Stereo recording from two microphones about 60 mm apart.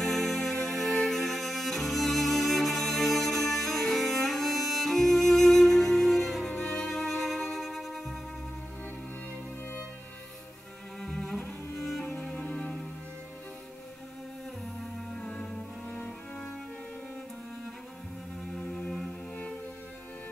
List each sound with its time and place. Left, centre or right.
0.0 s music: centre
11.0 s cello: centre
12.0 s music: centre
15.1 s cello: centre
18.7 s music: centre